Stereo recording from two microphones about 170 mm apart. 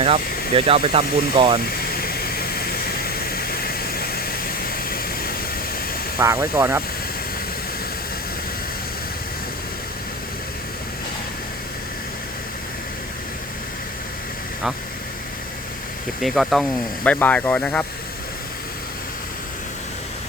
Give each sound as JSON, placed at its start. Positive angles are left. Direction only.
{"t": 0.5, "sound": "speech", "side_deg": -35}
{"t": 2.0, "sound": "vehicle", "side_deg": 65}
{"t": 3.2, "sound": "a sound", "side_deg": 65}
{"t": 6.1, "sound": "speech", "side_deg": -15}
{"t": 16.2, "sound": "speech", "side_deg": 0}